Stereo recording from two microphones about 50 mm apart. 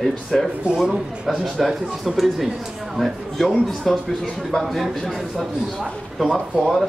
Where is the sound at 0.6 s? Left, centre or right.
Right.